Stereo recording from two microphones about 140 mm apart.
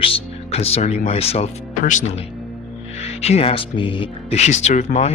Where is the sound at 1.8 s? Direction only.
60° left (ahead or behind).